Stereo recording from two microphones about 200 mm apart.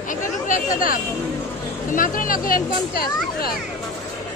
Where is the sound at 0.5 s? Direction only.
45° left (ahead or behind).